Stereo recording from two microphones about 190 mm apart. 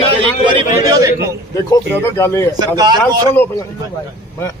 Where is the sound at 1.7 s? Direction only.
15° left (ahead or behind).